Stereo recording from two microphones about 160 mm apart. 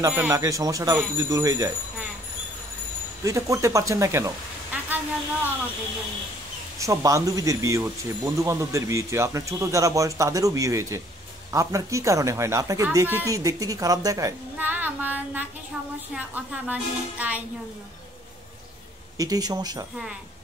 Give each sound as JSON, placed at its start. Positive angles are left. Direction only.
{"t": 0.0, "sound": "speech", "side_deg": -15}
{"t": 3.3, "sound": "speech", "side_deg": -20}
{"t": 6.8, "sound": "speech", "side_deg": -20}
{"t": 19.1, "sound": "speech", "side_deg": -25}